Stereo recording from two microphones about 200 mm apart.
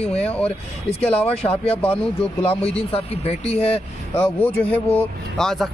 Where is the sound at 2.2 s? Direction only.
30° left (ahead or behind).